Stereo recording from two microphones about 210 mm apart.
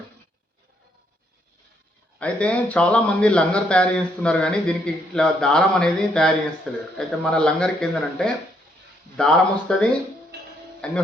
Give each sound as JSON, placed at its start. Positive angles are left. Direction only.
{"t": 2.1, "sound": "speech", "side_deg": 5}
{"t": 10.3, "sound": "music", "side_deg": -50}
{"t": 10.8, "sound": "speech", "side_deg": 5}